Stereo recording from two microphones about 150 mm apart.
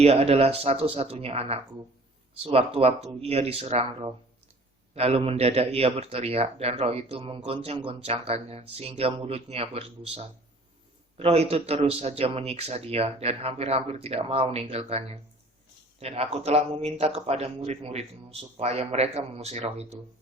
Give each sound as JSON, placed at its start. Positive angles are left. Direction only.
{"t": 0.0, "sound": "speech", "side_deg": -45}